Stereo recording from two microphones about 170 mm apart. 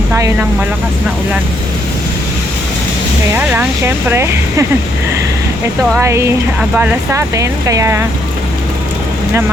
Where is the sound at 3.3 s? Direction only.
10° right (ahead or behind).